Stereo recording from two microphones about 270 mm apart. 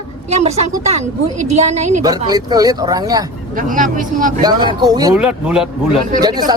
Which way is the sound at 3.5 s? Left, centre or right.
Right.